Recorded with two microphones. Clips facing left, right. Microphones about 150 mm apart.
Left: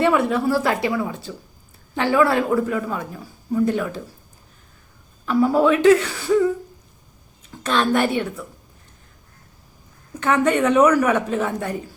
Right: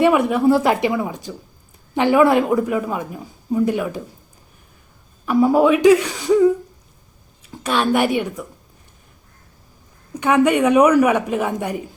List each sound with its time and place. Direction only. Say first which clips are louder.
0.0 s a man's voice: right 3 dB; 15° right (ahead or behind)
5.2 s a man's voice: right 3 dB; 15° right (ahead or behind)
10.2 s a man's voice: right 3 dB; 15° right (ahead or behind)